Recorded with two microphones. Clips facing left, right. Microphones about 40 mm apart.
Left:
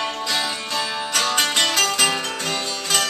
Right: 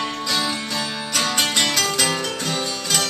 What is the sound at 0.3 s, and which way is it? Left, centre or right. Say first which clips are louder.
Music: right 3 dB; centre.